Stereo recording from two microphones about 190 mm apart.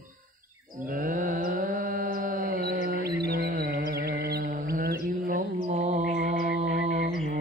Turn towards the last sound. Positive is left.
turn(degrees=-35)  # may be behind; listen again after turning